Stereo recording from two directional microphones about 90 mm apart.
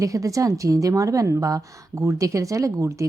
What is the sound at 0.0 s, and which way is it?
A woman's voice, 40° right (ahead or behind).